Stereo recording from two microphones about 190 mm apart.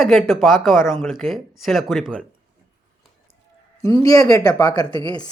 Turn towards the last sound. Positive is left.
turn(degrees=20)  # may be behind; listen again after turning